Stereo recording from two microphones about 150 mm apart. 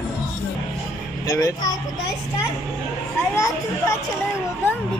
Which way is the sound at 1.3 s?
20° left (ahead or behind).